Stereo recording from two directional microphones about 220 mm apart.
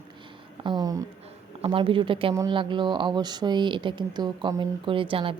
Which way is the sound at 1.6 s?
25° right (ahead or behind).